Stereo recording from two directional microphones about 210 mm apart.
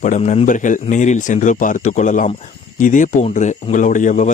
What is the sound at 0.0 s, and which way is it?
A man's voice, 35° left (ahead or behind).